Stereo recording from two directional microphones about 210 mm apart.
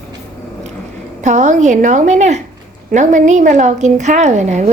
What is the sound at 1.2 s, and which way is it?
A woman's voice, 35° right (ahead or behind).